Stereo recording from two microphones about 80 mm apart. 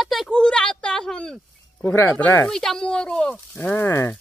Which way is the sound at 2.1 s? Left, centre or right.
Left.